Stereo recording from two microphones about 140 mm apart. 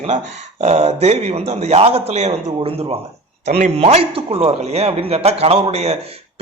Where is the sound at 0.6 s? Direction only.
50° right (ahead or behind).